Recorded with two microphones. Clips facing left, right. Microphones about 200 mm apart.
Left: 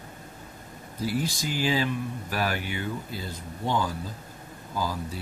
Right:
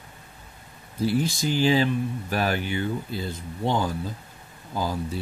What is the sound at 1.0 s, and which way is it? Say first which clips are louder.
Speech: right 5 dB; 25° right (ahead or behind).